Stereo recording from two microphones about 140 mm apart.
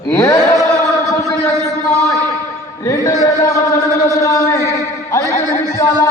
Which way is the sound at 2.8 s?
20° left (ahead or behind).